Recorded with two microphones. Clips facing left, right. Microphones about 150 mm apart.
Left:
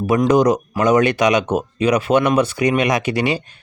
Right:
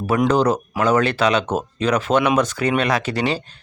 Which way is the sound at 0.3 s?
15° left (ahead or behind).